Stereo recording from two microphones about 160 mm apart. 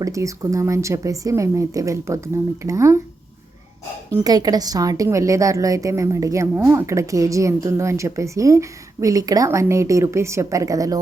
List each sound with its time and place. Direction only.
0.0 s a woman's voice: 20° right (ahead or behind)
4.1 s a woman's voice: 25° right (ahead or behind)